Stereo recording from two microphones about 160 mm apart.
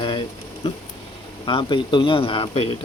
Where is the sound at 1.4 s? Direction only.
30° left (ahead or behind).